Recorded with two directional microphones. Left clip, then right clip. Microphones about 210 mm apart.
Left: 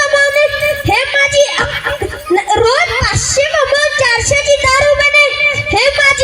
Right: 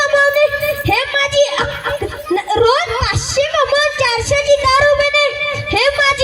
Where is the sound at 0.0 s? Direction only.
40° left (ahead or behind).